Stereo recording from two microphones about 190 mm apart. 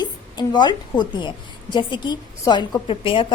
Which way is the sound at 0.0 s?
20° left (ahead or behind).